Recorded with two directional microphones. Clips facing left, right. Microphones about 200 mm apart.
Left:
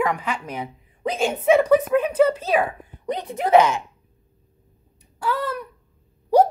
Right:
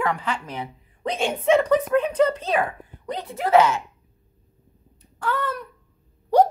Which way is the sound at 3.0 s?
20° left (ahead or behind).